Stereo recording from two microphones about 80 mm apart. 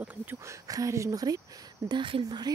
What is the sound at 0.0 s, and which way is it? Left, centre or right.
Speech, centre.